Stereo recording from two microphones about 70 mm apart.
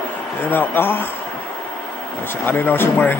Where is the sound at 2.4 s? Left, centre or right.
Left.